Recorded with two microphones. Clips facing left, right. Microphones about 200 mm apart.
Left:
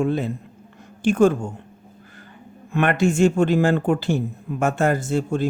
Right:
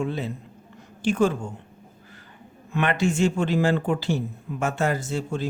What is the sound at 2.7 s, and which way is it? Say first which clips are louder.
Speech: left 4 dB; 50° left (ahead or behind).